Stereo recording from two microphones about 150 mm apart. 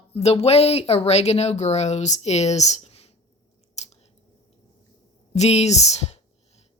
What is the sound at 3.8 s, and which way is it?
Scissors, 50° left (ahead or behind).